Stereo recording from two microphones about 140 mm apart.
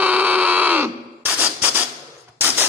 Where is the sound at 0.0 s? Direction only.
10° right (ahead or behind).